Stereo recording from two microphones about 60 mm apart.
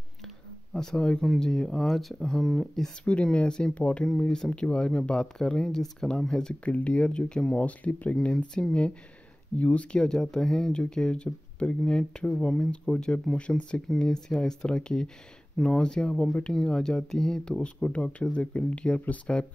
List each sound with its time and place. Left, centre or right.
0.7 s speech: centre
3.1 s speech: centre
6.6 s speech: left